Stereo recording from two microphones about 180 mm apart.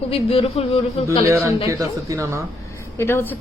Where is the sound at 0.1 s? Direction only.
30° left (ahead or behind).